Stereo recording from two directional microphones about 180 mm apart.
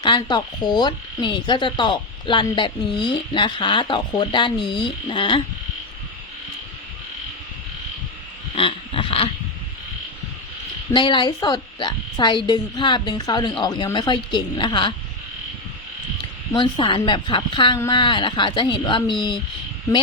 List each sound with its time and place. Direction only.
0.0 s frog: 25° left (ahead or behind)
8.5 s a sound: 30° left (ahead or behind)
10.9 s frog: 25° left (ahead or behind)
16.5 s frog: 25° left (ahead or behind)